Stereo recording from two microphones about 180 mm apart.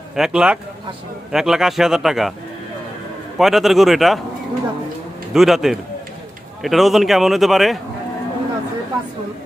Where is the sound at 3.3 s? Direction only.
Centre (ahead or behind).